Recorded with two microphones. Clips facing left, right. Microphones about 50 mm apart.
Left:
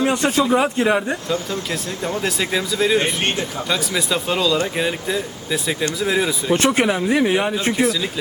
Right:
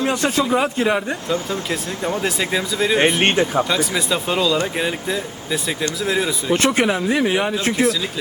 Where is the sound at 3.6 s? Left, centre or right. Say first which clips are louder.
Right 1 dB; centre.